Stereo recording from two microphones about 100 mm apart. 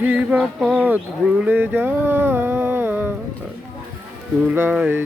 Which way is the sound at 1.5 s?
20° right (ahead or behind).